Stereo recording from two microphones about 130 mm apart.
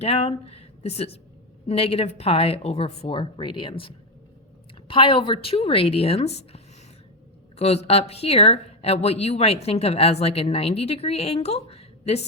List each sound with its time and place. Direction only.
0.0 s a woman's voice: 50° left (ahead or behind)